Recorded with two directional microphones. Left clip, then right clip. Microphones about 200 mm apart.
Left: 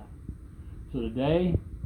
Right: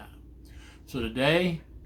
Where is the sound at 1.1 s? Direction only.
5° right (ahead or behind).